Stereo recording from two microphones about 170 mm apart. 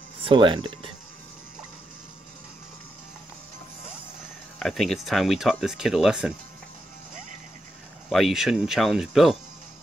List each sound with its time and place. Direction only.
0.2 s speech: 30° right (ahead or behind)
4.6 s speech: centre (ahead or behind)
8.1 s speech: centre (ahead or behind)